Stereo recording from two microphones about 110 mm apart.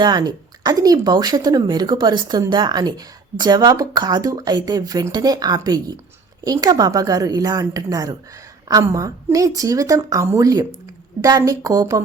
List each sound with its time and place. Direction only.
0.0 s speech: 40° right (ahead or behind)